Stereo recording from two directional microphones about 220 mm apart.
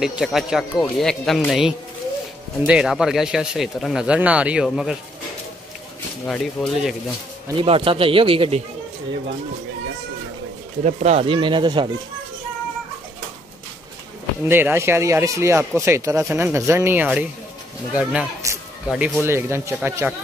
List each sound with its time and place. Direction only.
0.0 s speech: centre (ahead or behind)
6.2 s speech: 5° left (ahead or behind)
7.6 s speech: 25° right (ahead or behind)
10.8 s speech: 35° right (ahead or behind)
14.5 s speech: 10° right (ahead or behind)